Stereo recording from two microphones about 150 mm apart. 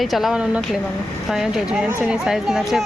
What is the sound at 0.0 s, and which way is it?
A child's voice, centre (ahead or behind).